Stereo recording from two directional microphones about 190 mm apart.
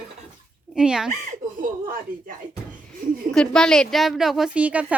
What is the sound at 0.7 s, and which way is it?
Speech, 5° right (ahead or behind).